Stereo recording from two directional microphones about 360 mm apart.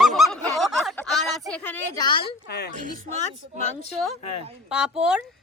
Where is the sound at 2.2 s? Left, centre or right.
Left.